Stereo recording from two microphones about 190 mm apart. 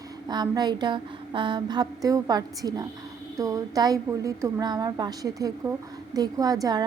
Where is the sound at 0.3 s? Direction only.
20° right (ahead or behind).